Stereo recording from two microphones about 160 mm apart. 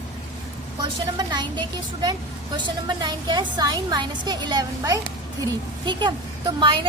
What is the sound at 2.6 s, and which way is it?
A woman's voice, 25° right (ahead or behind).